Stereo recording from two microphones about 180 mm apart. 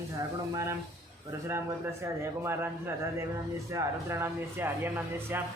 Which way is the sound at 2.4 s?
15° right (ahead or behind).